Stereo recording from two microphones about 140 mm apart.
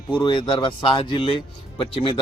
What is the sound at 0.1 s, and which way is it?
Speech, 35° left (ahead or behind).